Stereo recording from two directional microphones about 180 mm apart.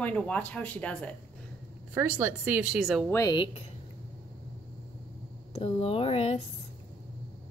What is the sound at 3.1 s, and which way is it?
Speech, 20° left (ahead or behind).